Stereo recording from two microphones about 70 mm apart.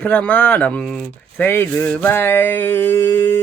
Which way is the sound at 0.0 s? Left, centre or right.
Left.